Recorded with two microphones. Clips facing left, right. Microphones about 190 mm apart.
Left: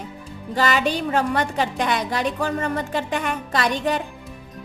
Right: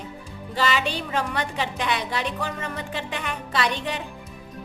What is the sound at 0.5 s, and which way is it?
A woman's voice, 45° left (ahead or behind).